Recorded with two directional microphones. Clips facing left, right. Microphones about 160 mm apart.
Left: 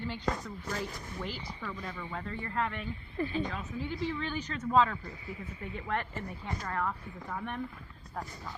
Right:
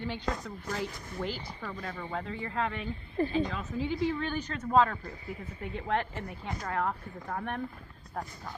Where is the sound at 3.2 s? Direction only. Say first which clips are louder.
Right 4 dB; 35° right (ahead or behind).